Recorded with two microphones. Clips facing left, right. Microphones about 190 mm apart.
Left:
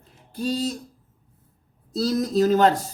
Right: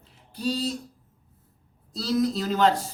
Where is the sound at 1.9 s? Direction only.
45° left (ahead or behind).